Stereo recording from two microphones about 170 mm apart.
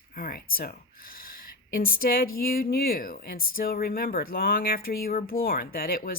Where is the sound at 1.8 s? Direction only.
60° left (ahead or behind).